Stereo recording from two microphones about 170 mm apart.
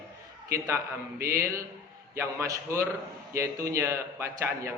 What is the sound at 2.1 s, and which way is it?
A man's voice, 15° right (ahead or behind).